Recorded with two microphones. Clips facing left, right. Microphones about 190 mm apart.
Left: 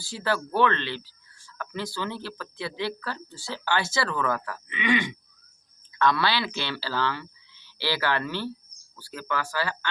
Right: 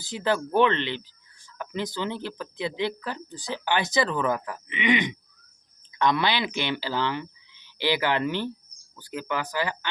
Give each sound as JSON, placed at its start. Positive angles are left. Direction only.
{"t": 0.0, "sound": "speech", "side_deg": -20}